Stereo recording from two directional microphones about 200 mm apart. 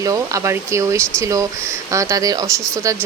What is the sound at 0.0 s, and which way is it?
Speech, 15° right (ahead or behind).